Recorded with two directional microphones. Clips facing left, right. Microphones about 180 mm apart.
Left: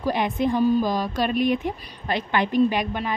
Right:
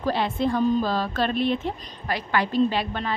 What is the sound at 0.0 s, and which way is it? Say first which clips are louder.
A woman's voice: left 1 dB; 15° left (ahead or behind).